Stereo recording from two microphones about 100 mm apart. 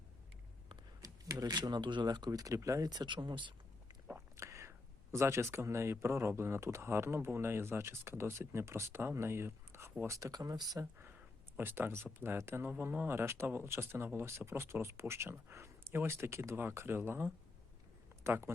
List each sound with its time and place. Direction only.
1.0 s speech: 40° right (ahead or behind)
4.4 s whispering: 30° right (ahead or behind)
5.1 s speech: 25° right (ahead or behind)
11.5 s speech: 20° right (ahead or behind)